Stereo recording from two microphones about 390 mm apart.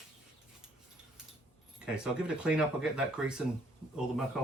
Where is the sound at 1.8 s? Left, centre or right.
Centre.